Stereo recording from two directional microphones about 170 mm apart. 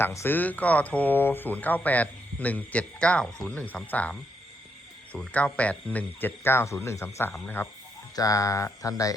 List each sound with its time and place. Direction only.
0.0 s speech: 15° left (ahead or behind)